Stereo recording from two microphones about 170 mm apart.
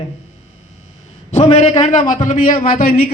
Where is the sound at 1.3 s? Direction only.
35° left (ahead or behind); by 3.0 s 60° left (ahead or behind).